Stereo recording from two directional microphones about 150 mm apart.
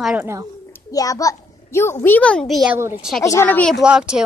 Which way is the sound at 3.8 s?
5° right (ahead or behind).